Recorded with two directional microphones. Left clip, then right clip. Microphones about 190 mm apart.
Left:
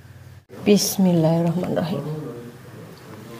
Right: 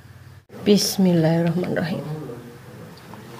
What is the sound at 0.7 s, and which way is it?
A woman's voice, centre (ahead or behind).